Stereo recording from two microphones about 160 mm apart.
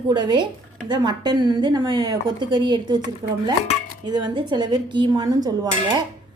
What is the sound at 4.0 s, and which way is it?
A woman's voice, 25° right (ahead or behind).